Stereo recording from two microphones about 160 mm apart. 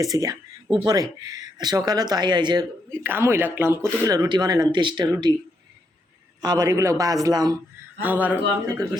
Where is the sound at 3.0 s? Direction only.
15° right (ahead or behind).